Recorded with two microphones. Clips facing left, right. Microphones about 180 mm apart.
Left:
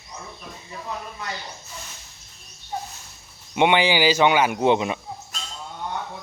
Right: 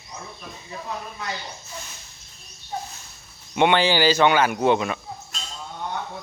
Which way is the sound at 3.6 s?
15° left (ahead or behind).